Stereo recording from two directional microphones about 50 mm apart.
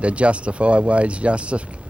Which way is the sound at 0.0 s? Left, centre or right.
Right.